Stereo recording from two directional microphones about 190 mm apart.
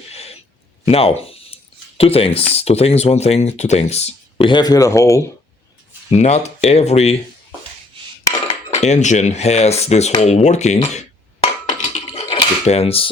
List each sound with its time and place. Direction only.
0.1 s a sound: 35° left (ahead or behind)
0.9 s speech: 30° left (ahead or behind); by 5.2 s 15° left (ahead or behind)
6.1 s speech: 35° left (ahead or behind)
8.4 s dishes: 35° left (ahead or behind)
11.9 s coin: 35° left (ahead or behind)